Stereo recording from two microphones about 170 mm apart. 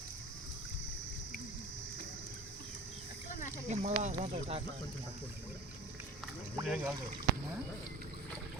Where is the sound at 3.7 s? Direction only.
40° right (ahead or behind).